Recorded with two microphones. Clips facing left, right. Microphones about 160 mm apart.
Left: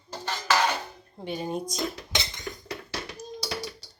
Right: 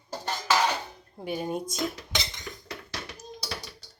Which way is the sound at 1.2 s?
5° right (ahead or behind).